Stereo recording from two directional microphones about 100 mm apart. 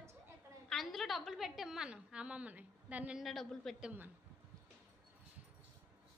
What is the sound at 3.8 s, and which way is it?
Speech, 15° right (ahead or behind).